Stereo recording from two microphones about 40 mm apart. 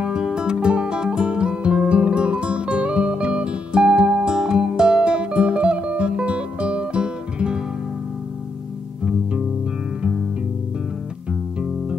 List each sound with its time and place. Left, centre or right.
0.0 s music: centre